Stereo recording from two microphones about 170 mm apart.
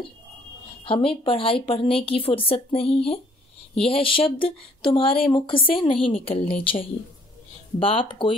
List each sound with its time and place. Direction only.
0.8 s a woman's voice: 30° left (ahead or behind)